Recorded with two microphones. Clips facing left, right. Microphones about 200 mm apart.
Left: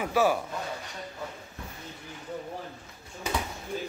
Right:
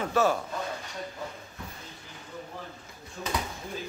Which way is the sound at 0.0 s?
10° left (ahead or behind).